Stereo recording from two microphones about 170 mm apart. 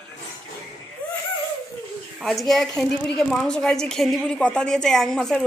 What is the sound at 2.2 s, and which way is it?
A woman's voice, centre (ahead or behind).